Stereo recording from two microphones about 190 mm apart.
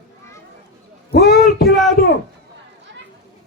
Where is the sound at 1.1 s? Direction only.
55° left (ahead or behind).